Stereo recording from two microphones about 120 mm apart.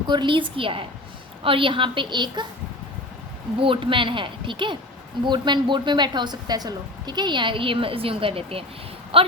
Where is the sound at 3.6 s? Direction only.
45° right (ahead or behind).